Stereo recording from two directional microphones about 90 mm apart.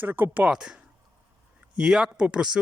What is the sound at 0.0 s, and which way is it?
Speech, 20° right (ahead or behind).